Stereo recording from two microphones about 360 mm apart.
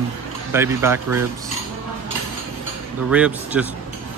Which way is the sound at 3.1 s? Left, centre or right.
Centre.